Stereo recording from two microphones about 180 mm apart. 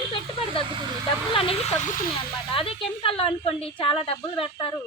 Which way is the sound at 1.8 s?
45° left (ahead or behind).